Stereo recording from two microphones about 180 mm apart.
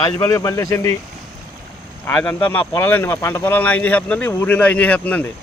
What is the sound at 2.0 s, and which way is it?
Speech, 10° left (ahead or behind).